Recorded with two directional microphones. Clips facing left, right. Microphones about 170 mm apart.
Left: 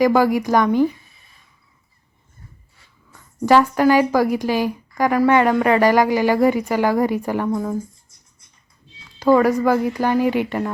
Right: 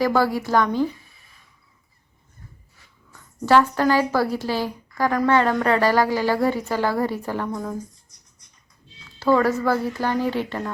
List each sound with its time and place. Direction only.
0.0 s a woman's voice: 15° left (ahead or behind)
3.4 s a woman's voice: 15° left (ahead or behind)
9.1 s a woman's voice: 15° left (ahead or behind)